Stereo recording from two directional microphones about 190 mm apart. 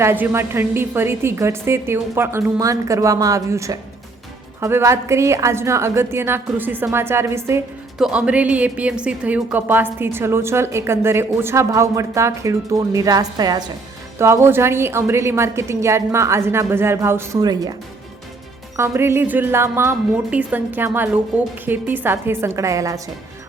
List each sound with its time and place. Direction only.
0.0 s speech: 10° right (ahead or behind)
18.8 s speech: 15° right (ahead or behind)